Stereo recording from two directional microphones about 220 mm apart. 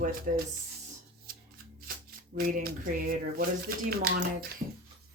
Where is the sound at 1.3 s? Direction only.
40° right (ahead or behind).